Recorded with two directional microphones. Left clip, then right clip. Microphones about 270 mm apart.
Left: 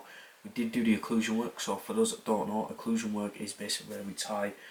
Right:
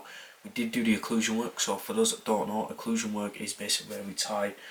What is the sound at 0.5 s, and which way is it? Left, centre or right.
Speech, centre.